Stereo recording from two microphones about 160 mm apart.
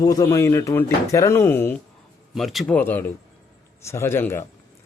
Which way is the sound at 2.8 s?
10° left (ahead or behind).